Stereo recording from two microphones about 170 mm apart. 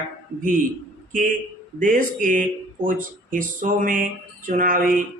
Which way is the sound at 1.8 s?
50° right (ahead or behind).